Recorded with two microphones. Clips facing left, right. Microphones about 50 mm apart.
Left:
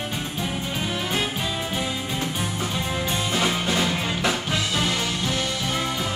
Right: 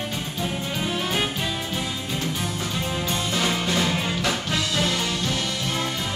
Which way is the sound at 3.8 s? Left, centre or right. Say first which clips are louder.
Even; centre.